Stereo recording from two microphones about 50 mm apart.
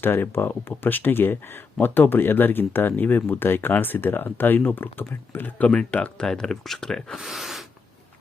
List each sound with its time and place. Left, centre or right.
0.0 s speech: left
5.6 s speech: left
6.2 s speech: centre
7.2 s speech: centre